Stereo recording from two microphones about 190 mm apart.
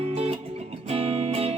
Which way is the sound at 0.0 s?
30° right (ahead or behind).